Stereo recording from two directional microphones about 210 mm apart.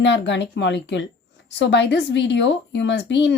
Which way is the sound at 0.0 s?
60° left (ahead or behind).